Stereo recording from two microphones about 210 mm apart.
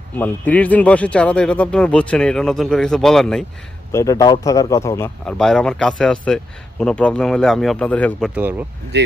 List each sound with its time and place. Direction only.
0.2 s speech: 5° left (ahead or behind)
3.9 s speech: 15° left (ahead or behind)
8.4 s speech: 10° right (ahead or behind)
8.9 s speech: 55° right (ahead or behind)